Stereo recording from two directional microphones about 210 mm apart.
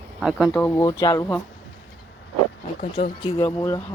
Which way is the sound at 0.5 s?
15° left (ahead or behind).